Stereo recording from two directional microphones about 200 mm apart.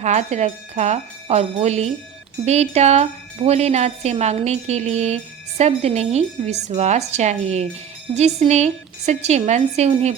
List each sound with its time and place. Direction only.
0.0 s speech: 35° right (ahead or behind)